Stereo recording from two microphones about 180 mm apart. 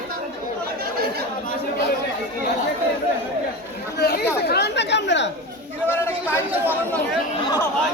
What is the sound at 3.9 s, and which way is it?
Chatter, 65° left (ahead or behind).